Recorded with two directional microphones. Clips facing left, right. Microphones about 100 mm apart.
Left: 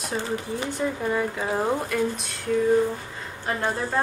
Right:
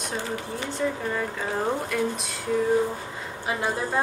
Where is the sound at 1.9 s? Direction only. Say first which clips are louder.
Left 1 dB; centre (ahead or behind).